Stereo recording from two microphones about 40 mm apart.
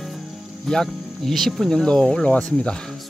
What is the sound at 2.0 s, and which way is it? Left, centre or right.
Speech, left.